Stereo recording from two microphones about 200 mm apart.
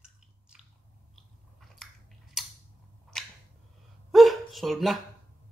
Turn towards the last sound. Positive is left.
turn(degrees=0)  # may be behind; listen again after turning